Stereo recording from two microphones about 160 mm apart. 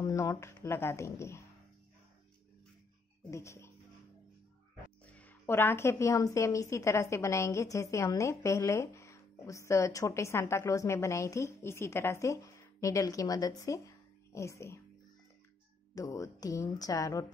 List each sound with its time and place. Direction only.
0.0 s speech: 20° left (ahead or behind)
3.3 s speech: 20° left (ahead or behind)
5.0 s a woman's voice: 10° left (ahead or behind)
15.9 s a woman's voice: 20° left (ahead or behind)